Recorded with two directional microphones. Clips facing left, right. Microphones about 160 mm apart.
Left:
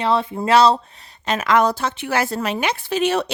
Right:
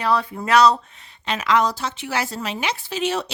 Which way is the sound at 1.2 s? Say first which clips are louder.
Left 3 dB; 50° left (ahead or behind).